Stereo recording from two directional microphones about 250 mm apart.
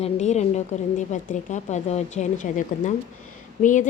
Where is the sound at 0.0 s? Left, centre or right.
Left.